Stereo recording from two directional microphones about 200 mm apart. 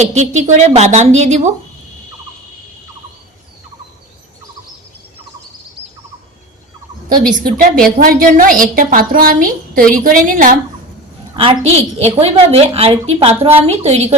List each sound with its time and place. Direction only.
0.1 s a woman's voice: 35° right (ahead or behind)
7.3 s a woman's voice: 45° right (ahead or behind)
11.3 s a woman's voice: 30° right (ahead or behind)